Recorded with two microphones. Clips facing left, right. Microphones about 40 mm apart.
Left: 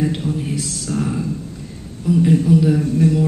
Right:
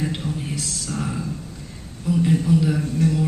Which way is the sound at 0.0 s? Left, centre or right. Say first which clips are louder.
Left 6 dB; centre.